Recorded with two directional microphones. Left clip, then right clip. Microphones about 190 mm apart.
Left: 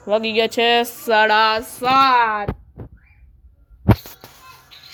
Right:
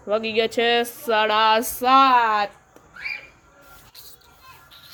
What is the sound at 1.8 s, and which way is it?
Speech, 10° right (ahead or behind).